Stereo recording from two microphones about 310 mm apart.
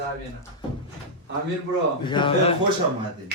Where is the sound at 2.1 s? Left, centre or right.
Centre.